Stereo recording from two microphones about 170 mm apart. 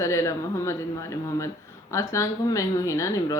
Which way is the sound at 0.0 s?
20° left (ahead or behind).